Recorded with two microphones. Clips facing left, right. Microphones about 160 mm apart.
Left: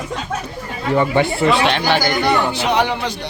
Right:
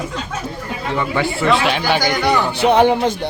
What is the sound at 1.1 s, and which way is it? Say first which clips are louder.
Speech: left 3 dB; 25° left (ahead or behind).